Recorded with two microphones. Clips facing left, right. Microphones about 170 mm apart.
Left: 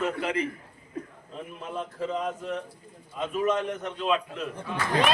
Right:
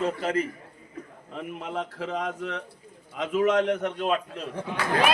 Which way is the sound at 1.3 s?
70° right (ahead or behind).